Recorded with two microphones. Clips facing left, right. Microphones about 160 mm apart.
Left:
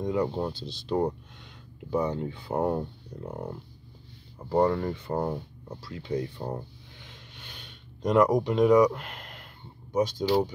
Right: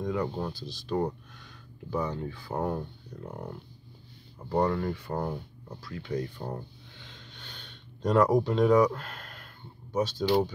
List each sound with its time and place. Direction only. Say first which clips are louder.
0.0 s speech: left 3 dB; 20° left (ahead or behind)
7.1 s a sound: even; 10° left (ahead or behind)
9.9 s speech: left 3 dB; 15° left (ahead or behind)